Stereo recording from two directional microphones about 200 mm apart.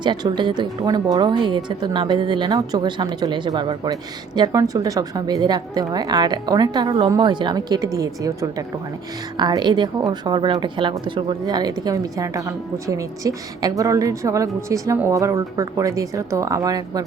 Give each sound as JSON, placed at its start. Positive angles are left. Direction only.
{"t": 0.0, "sound": "a woman's voice", "side_deg": -20}